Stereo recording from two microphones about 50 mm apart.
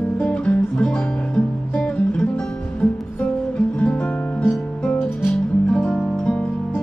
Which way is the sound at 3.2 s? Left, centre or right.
Left.